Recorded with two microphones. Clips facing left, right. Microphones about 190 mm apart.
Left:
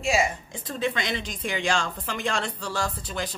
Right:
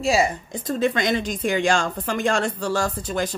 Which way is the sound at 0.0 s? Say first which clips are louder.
Right 4 dB; 35° right (ahead or behind).